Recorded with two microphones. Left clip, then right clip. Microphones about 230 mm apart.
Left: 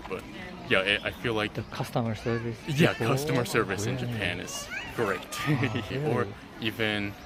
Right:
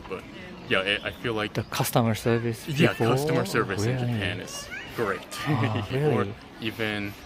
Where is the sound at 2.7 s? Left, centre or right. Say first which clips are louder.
Right 2 dB; centre.